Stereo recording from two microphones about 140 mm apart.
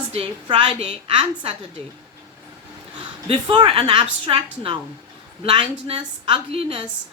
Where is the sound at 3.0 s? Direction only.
35° right (ahead or behind).